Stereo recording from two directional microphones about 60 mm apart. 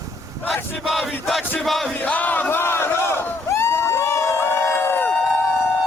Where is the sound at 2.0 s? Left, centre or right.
Left.